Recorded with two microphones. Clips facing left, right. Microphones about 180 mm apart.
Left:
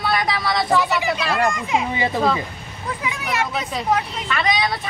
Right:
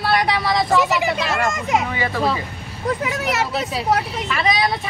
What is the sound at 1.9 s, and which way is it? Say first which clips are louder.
Speech: left 1 dB; 20° left (ahead or behind).